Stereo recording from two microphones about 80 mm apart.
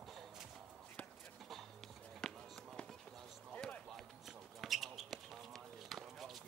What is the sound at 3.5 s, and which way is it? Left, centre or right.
Basketball bounce, centre.